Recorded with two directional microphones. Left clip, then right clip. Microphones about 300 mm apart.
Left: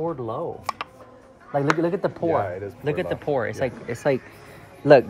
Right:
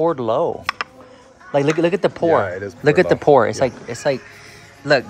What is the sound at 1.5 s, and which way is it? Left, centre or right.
Speech, centre.